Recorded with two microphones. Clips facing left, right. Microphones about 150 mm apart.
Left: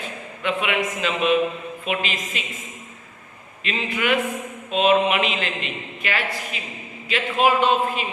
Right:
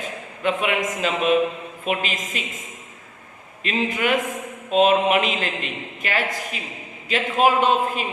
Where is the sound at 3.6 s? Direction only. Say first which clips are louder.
Right 3 dB; 45° right (ahead or behind).